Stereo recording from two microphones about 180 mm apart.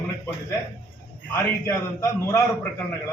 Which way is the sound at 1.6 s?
15° left (ahead or behind).